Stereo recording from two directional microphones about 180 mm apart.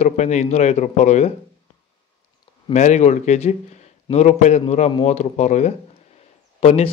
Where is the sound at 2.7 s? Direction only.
40° left (ahead or behind).